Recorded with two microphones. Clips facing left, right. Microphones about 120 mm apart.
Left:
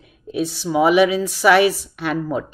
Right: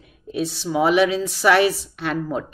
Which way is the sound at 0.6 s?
60° left (ahead or behind).